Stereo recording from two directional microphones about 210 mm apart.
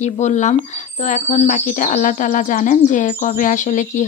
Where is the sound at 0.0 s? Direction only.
35° left (ahead or behind).